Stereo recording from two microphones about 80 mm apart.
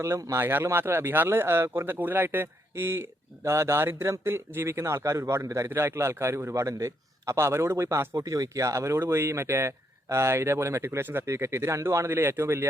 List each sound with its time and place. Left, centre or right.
0.0 s speech: right